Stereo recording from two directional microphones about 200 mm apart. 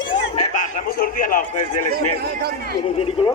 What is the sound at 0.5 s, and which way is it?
A man's voice, 40° left (ahead or behind).